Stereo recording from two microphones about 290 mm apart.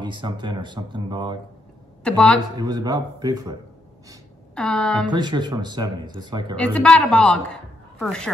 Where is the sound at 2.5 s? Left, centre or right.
Centre.